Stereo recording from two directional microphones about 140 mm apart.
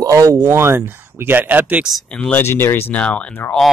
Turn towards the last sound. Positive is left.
turn(degrees=10)  # may be behind; listen again after turning